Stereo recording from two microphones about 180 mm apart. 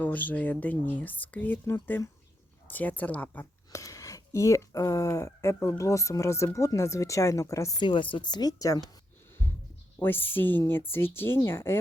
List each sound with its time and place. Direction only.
0.0 s speech: 10° left (ahead or behind)
10.0 s speech: 10° left (ahead or behind)